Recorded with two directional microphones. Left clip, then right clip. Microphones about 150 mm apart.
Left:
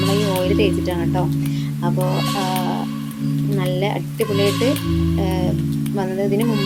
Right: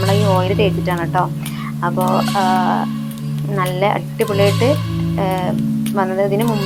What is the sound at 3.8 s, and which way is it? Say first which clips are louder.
Speech: right 5 dB; 25° left (ahead or behind).